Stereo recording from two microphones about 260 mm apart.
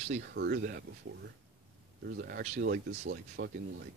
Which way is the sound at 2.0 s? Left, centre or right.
Right.